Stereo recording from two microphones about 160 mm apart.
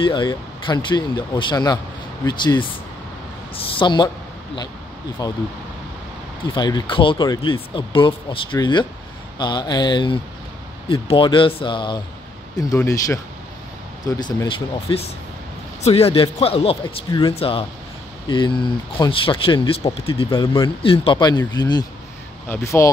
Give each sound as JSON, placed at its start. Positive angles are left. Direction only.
{"t": 0.0, "sound": "speech", "side_deg": 30}
{"t": 5.2, "sound": "speech", "side_deg": 25}
{"t": 6.5, "sound": "a man's voice", "side_deg": 25}